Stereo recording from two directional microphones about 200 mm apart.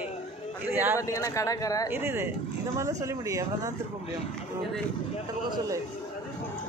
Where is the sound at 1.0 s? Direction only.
15° left (ahead or behind).